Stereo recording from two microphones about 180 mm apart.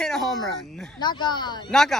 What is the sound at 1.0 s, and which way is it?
Speech, 25° left (ahead or behind).